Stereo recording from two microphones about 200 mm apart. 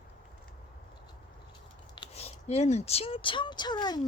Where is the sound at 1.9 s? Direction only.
25° left (ahead or behind).